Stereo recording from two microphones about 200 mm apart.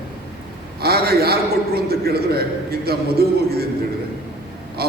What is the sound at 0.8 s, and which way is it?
A man's voice, 50° right (ahead or behind).